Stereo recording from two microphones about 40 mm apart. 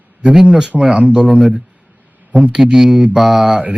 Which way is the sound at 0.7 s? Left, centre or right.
Centre.